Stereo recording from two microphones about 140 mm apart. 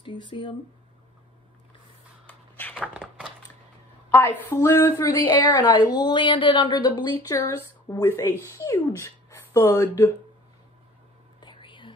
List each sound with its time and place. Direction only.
0.0 s speech: 35° left (ahead or behind)
2.2 s cupboard open or close: 10° left (ahead or behind)
4.1 s a woman's voice: 15° left (ahead or behind)
11.4 s whispering: 35° left (ahead or behind)